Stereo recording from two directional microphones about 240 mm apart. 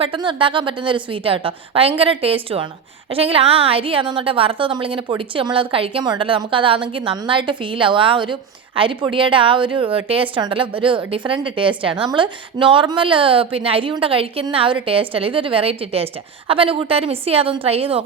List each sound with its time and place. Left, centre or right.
0.0 s a woman's voice: right